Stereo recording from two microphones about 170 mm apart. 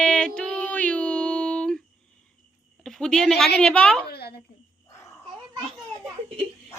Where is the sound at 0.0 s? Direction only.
5° left (ahead or behind).